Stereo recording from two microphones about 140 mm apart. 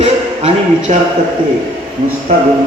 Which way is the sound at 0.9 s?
55° right (ahead or behind).